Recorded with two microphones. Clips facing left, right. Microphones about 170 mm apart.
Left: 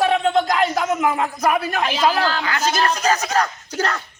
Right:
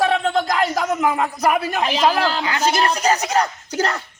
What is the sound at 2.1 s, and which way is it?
Speech, 15° right (ahead or behind).